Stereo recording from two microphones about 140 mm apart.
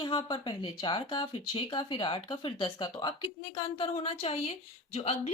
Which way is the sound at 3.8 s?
45° left (ahead or behind).